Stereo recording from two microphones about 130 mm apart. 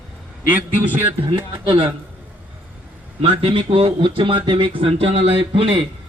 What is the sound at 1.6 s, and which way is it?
Speech, 40° right (ahead or behind).